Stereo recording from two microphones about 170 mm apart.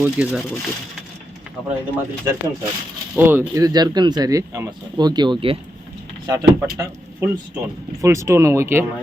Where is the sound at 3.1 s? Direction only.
10° right (ahead or behind); by 5.6 s 30° right (ahead or behind).